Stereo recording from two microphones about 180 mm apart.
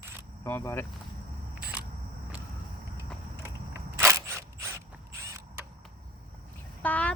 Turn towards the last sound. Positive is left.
turn(degrees=10)  # may be behind; listen again after turning